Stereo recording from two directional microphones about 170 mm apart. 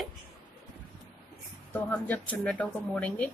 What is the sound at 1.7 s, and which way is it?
Speech, 10° left (ahead or behind).